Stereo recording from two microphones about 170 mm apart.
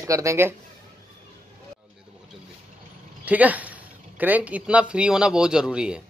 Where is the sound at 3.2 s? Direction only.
10° right (ahead or behind).